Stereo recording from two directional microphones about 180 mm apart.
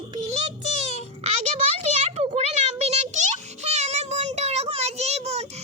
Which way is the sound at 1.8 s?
35° right (ahead or behind).